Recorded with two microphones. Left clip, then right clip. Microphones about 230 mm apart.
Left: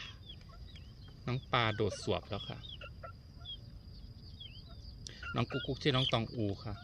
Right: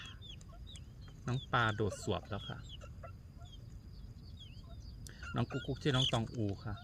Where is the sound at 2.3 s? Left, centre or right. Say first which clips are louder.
Left 3 dB; centre.